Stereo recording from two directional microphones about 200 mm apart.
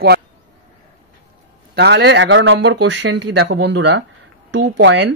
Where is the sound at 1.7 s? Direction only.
55° right (ahead or behind).